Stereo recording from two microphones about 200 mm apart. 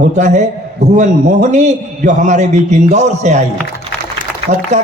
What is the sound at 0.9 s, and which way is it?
Speech, 40° right (ahead or behind).